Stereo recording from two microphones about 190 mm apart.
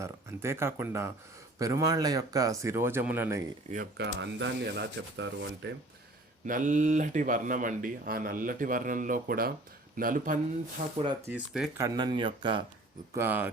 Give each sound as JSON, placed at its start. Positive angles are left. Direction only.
{"t": 0.0, "sound": "speech", "side_deg": -15}
{"t": 3.7, "sound": "speech", "side_deg": -55}
{"t": 6.4, "sound": "speech", "side_deg": -40}
{"t": 11.3, "sound": "speech", "side_deg": -5}
{"t": 11.8, "sound": "speech", "side_deg": -20}
{"t": 13.1, "sound": "speech", "side_deg": -10}